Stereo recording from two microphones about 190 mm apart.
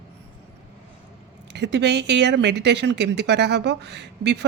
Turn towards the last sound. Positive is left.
turn(degrees=-65)  # may be behind; listen again after turning